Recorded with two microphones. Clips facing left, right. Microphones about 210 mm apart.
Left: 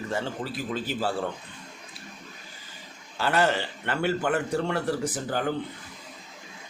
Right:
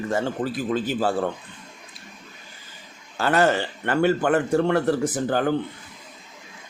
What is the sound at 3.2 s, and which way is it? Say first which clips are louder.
Speech: right 4 dB; 50° right (ahead or behind).